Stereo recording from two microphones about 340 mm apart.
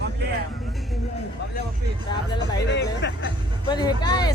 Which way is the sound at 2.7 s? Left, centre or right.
Left.